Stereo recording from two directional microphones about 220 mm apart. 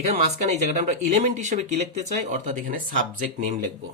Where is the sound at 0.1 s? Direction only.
30° right (ahead or behind).